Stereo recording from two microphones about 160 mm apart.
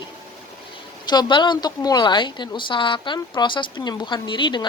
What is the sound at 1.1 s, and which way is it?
A woman's voice, 25° left (ahead or behind).